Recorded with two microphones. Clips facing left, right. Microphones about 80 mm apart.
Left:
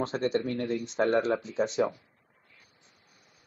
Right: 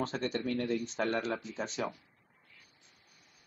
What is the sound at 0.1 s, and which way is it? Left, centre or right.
Speech, left.